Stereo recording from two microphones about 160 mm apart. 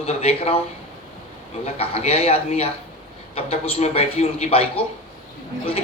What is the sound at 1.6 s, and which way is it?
A man's voice, 40° left (ahead or behind).